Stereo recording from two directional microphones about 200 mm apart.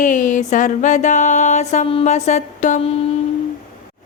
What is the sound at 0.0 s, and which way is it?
Speech, 40° left (ahead or behind).